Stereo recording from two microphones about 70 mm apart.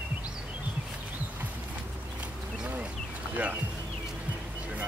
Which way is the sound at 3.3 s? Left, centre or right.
Right.